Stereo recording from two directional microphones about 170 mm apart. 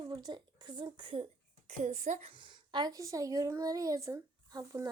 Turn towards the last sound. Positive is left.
turn(degrees=-20)  # may be behind; listen again after turning